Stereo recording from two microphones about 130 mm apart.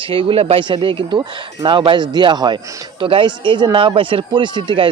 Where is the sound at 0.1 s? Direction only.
45° right (ahead or behind).